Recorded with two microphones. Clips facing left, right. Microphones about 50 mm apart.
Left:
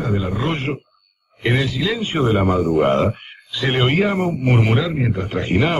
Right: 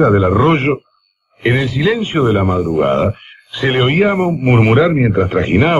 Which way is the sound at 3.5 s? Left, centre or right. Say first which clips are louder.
Right 4 dB; right.